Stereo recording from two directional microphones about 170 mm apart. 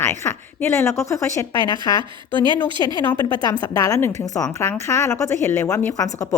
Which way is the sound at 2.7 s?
25° left (ahead or behind).